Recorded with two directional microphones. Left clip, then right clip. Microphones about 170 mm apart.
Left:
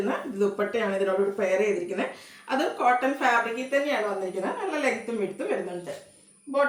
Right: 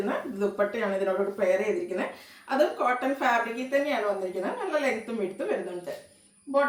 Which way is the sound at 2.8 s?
15° left (ahead or behind).